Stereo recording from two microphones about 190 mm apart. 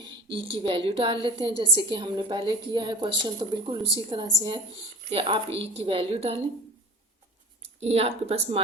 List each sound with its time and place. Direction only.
0.0 s a woman's voice: 30° right (ahead or behind)
7.8 s a woman's voice: 35° right (ahead or behind)